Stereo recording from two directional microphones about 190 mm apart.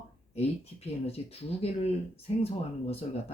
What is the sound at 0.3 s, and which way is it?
Speech, 35° left (ahead or behind).